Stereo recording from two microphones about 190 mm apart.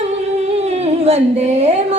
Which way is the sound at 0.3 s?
35° right (ahead or behind).